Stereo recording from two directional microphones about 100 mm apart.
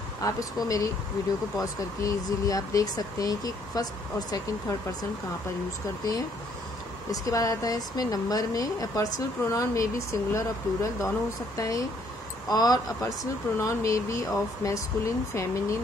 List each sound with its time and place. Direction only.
0.2 s speech: 35° left (ahead or behind)
7.1 s speech: 35° left (ahead or behind)